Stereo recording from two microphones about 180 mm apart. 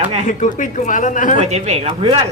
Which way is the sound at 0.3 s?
45° left (ahead or behind).